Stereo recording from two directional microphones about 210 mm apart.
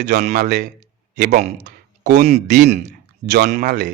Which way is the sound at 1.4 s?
30° right (ahead or behind).